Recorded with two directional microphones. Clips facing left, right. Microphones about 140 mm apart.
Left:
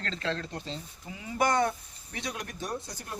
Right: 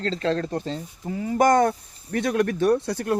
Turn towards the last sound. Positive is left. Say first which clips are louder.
# right 16 dB
turn(degrees=-70)  # may be behind; listen again after turning